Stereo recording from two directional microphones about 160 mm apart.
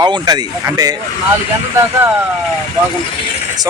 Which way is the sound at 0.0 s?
30° right (ahead or behind).